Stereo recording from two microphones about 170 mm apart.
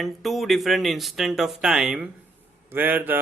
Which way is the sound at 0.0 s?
Centre (ahead or behind).